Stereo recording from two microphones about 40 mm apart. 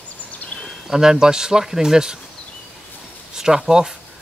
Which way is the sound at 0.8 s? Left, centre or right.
Centre.